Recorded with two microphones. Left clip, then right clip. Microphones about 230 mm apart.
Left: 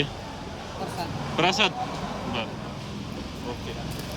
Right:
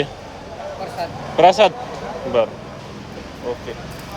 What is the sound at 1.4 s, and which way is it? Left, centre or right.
Speech, centre.